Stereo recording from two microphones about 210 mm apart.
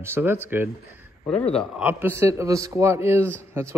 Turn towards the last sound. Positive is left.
turn(degrees=-10)  # may be behind; listen again after turning